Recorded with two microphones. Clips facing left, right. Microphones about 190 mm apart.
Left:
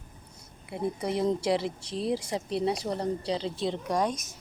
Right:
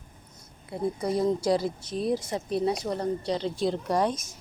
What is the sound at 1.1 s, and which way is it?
A woman's voice, 25° left (ahead or behind).